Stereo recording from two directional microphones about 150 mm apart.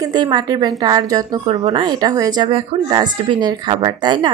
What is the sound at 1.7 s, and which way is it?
Speech, 25° right (ahead or behind).